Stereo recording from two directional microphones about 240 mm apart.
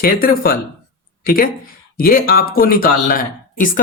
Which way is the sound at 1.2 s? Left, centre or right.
Left.